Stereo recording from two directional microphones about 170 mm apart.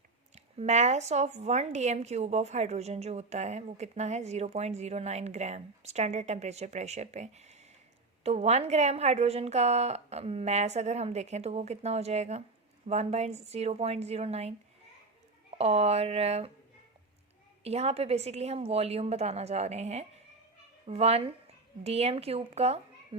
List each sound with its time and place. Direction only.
0.3 s a woman's voice: 40° right (ahead or behind)
15.5 s a woman's voice: 35° right (ahead or behind)
17.6 s a woman's voice: 40° right (ahead or behind)